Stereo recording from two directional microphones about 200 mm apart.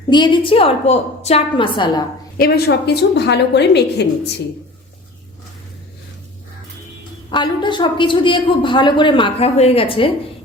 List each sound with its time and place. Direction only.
0.1 s a woman's voice: 20° left (ahead or behind)
2.4 s a woman's voice: 55° left (ahead or behind)
7.3 s a woman's voice: 25° left (ahead or behind)